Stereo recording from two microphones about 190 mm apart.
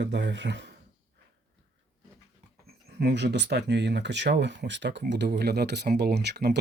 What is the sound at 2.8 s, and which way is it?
Speech, 60° right (ahead or behind).